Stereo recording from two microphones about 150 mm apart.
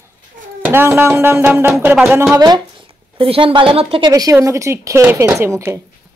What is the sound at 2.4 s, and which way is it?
A woman's voice, 30° right (ahead or behind).